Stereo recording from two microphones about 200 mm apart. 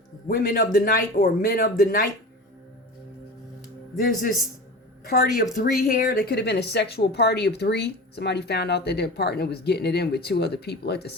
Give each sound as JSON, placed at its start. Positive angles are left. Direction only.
{"t": 0.3, "sound": "speech", "side_deg": 45}
{"t": 5.0, "sound": "speech", "side_deg": 45}